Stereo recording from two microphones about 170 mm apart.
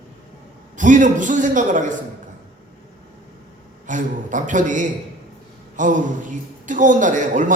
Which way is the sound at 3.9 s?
50° right (ahead or behind).